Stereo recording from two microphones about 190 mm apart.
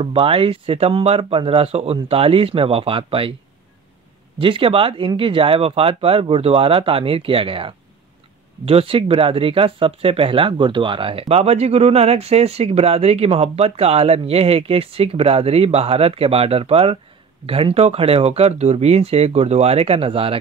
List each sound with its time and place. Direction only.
0.0 s speech: 30° right (ahead or behind)
4.4 s speech: 30° right (ahead or behind)